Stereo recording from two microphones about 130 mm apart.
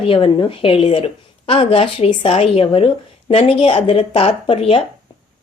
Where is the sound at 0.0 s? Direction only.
45° left (ahead or behind).